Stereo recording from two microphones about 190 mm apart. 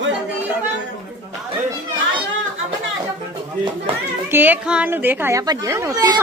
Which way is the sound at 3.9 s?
30° right (ahead or behind).